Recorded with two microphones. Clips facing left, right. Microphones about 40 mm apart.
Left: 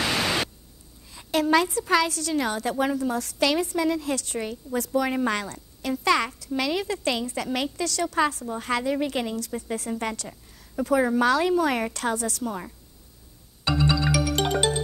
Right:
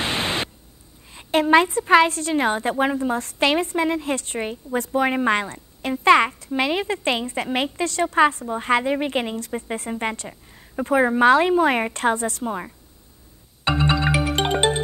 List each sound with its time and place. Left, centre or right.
0.0 s static: right
1.1 s a woman's voice: right
13.7 s music: right